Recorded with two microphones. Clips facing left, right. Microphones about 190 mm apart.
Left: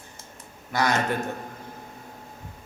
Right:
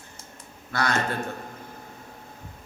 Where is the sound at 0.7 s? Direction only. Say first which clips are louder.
Left 3 dB; 15° left (ahead or behind).